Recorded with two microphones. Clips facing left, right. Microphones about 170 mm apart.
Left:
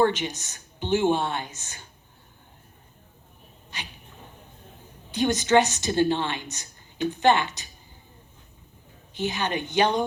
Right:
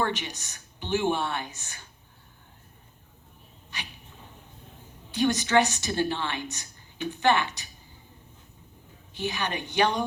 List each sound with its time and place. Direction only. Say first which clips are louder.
0.0 s speech: left 7 dB; 20° left (ahead or behind)
5.1 s speech: left 2 dB; 20° left (ahead or behind)
9.1 s speech: left 3 dB; 20° left (ahead or behind)